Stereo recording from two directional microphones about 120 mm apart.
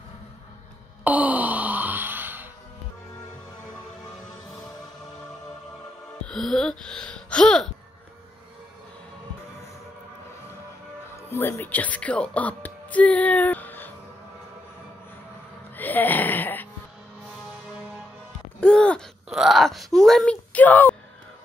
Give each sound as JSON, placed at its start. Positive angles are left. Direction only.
{"t": 1.0, "sound": "wail", "side_deg": -15}
{"t": 6.2, "sound": "a sound", "side_deg": 5}
{"t": 11.2, "sound": "speech", "side_deg": 20}
{"t": 15.7, "sound": "music", "side_deg": 15}
{"t": 18.6, "sound": "gasp", "side_deg": 10}
{"t": 19.2, "sound": "groan", "side_deg": -5}
{"t": 20.5, "sound": "a sound", "side_deg": 15}